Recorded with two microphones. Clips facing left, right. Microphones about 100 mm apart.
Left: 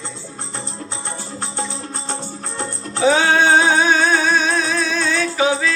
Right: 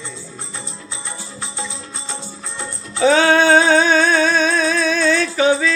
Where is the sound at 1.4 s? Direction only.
40° left (ahead or behind).